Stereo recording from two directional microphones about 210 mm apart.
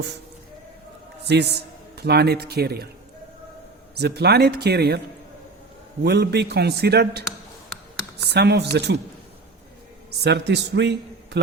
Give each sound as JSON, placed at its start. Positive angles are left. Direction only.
{"t": 1.3, "sound": "a man's voice", "side_deg": -50}
{"t": 3.9, "sound": "a man's voice", "side_deg": -50}
{"t": 6.0, "sound": "a man's voice", "side_deg": -50}
{"t": 10.2, "sound": "a man's voice", "side_deg": -55}